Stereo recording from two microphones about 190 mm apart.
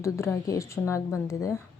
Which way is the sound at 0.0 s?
15° left (ahead or behind).